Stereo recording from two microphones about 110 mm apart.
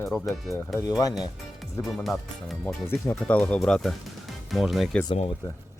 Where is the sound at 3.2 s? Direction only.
10° left (ahead or behind).